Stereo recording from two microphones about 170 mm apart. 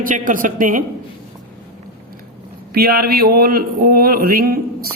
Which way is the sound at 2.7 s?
65° right (ahead or behind).